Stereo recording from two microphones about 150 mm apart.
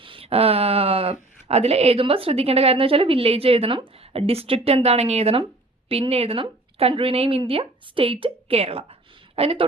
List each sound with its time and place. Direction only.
0.0 s a woman's voice: 35° right (ahead or behind)